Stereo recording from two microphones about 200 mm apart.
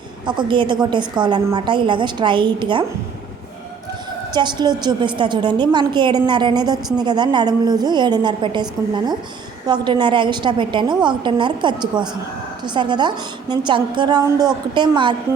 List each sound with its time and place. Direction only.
0.3 s a woman's voice: 25° right (ahead or behind)
4.4 s a woman's voice: 20° right (ahead or behind)